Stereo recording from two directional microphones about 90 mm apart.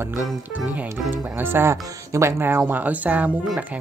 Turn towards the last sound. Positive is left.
turn(degrees=-15)  # may be behind; listen again after turning